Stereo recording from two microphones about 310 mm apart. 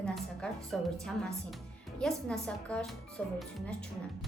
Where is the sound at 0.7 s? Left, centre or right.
Centre.